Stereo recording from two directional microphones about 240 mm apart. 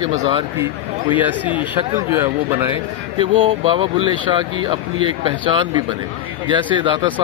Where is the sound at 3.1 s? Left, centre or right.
Right.